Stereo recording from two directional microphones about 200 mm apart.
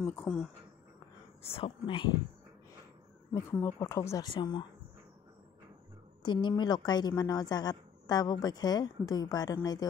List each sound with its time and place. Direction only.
0.0 s speech: 10° left (ahead or behind)
1.5 s a woman's voice: 25° left (ahead or behind)
3.3 s speech: 10° left (ahead or behind)
6.2 s a woman's voice: 20° left (ahead or behind)